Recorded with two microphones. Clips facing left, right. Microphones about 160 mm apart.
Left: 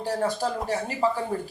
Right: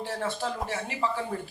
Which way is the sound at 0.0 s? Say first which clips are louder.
Left 5 dB; 40° left (ahead or behind).